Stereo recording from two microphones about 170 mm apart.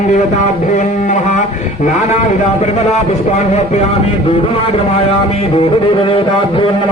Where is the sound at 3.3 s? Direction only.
40° left (ahead or behind).